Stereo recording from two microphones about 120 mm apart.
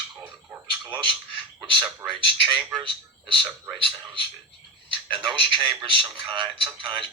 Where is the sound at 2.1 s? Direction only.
40° right (ahead or behind).